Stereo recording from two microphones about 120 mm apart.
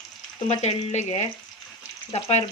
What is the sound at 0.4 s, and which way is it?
Speech, 70° left (ahead or behind).